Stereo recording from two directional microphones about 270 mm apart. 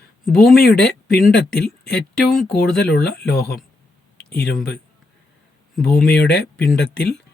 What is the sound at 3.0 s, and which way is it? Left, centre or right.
Speech, left.